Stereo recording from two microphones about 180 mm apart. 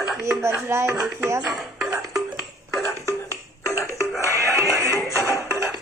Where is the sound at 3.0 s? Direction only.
20° left (ahead or behind).